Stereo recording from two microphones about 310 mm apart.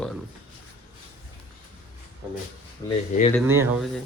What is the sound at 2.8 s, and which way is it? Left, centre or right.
Speech, centre.